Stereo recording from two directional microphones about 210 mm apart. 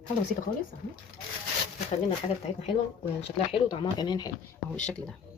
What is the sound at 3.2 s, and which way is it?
Speech, 30° left (ahead or behind).